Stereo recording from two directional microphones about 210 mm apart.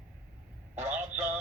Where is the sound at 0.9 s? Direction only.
10° right (ahead or behind).